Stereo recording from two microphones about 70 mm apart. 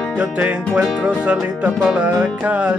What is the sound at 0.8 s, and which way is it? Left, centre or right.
Music, centre.